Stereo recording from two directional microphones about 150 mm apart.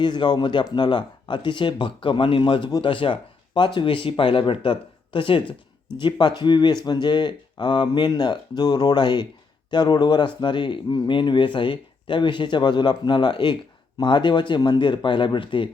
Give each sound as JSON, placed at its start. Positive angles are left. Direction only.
{"t": 0.0, "sound": "speech", "side_deg": 30}